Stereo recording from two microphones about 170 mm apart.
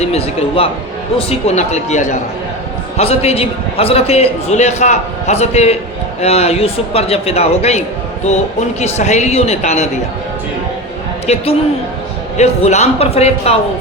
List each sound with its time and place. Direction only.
0.0 s a man's voice: 35° left (ahead or behind)
8.8 s a man's voice: 40° left (ahead or behind)
11.3 s a man's voice: 40° left (ahead or behind)